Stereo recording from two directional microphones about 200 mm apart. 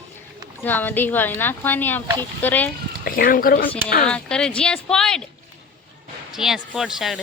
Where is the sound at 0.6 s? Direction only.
10° left (ahead or behind).